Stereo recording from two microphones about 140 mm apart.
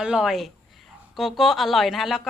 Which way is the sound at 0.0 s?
5° right (ahead or behind).